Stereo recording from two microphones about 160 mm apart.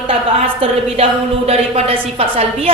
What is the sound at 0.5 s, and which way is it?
A woman's voice, 40° right (ahead or behind).